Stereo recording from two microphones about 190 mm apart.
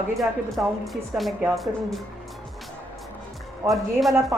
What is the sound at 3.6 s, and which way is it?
Speech, 15° right (ahead or behind).